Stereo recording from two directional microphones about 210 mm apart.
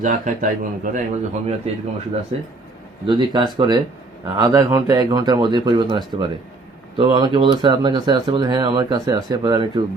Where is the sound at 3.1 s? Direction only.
20° right (ahead or behind).